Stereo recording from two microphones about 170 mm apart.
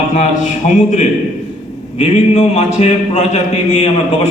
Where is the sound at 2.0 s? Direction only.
40° left (ahead or behind).